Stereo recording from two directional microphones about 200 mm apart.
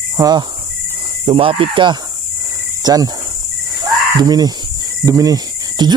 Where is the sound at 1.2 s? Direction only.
25° right (ahead or behind).